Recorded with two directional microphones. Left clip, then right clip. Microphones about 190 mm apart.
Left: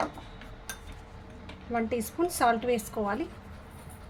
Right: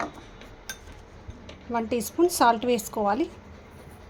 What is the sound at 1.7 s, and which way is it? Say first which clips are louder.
A woman's voice: right 3 dB; 30° right (ahead or behind).